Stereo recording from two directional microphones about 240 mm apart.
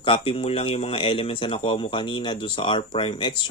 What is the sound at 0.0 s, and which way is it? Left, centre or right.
Speech, left.